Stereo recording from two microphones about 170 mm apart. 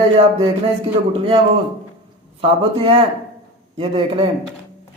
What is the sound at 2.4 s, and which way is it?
A man's voice, 35° right (ahead or behind).